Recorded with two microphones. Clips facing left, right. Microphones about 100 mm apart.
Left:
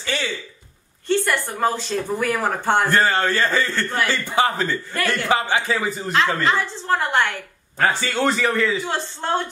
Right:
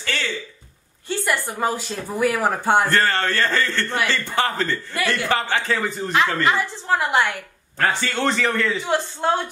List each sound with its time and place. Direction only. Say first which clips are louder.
0.0 s a sound: left 1 dB; 15° left (ahead or behind)
1.0 s speech: left 3 dB; 10° right (ahead or behind)
2.9 s a man's voice: left 2 dB; 10° left (ahead or behind)
6.4 s speech: even; 15° right (ahead or behind)
7.8 s a man's voice: left 1 dB; 5° left (ahead or behind)
8.8 s speech: right 4 dB; 15° right (ahead or behind)